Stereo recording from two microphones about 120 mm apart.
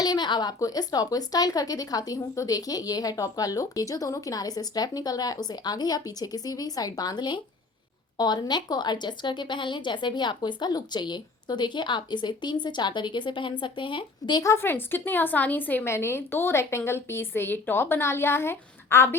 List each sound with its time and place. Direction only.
0.0 s a woman's voice: 35° left (ahead or behind)
14.4 s a woman's voice: 20° left (ahead or behind)